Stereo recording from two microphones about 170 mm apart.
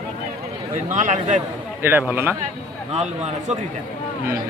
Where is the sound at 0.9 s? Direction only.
50° right (ahead or behind).